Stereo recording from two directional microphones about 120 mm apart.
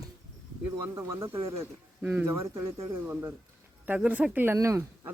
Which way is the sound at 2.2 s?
25° right (ahead or behind).